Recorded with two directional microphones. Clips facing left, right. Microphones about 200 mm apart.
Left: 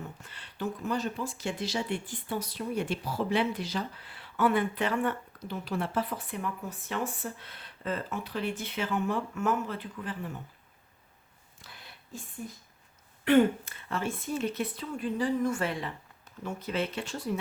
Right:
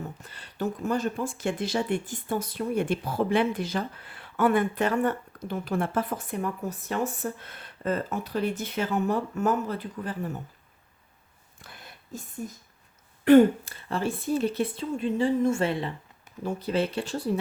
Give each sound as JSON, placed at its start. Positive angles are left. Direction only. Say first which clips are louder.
{"t": 0.2, "sound": "speech", "louder": "right 4 dB", "side_deg": -40}
{"t": 11.6, "sound": "a sound", "louder": "right 4 dB", "side_deg": -50}
{"t": 13.2, "sound": "a woman's voice", "louder": "right 6 dB", "side_deg": -40}